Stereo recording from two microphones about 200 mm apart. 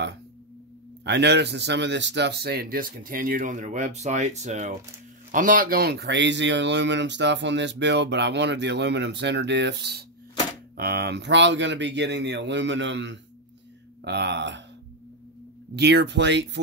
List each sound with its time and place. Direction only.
1.0 s speech: 60° right (ahead or behind)
15.7 s speech: 55° right (ahead or behind)